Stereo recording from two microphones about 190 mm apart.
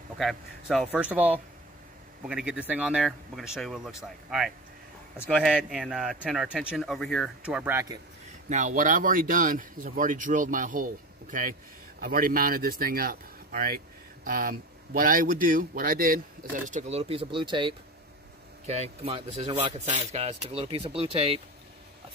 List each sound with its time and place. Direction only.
0.2 s speech: centre (ahead or behind)
5.1 s a man's voice: 10° left (ahead or behind)
5.4 s speech: centre (ahead or behind)
8.5 s speech: 40° right (ahead or behind)
16.6 s speech: 35° right (ahead or behind)